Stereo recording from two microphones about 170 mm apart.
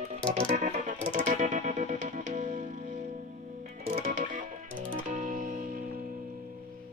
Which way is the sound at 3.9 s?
40° right (ahead or behind).